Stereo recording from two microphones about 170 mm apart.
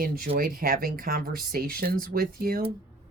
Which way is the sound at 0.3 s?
55° right (ahead or behind).